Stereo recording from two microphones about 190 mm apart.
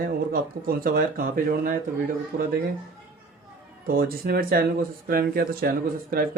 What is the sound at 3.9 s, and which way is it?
Speech, 50° right (ahead or behind).